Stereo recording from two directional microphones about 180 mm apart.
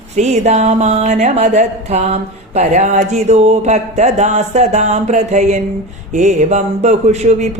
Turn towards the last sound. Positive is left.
turn(degrees=-40)  # may be behind; listen again after turning